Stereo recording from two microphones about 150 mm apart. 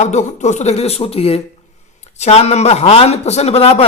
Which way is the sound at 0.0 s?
50° left (ahead or behind).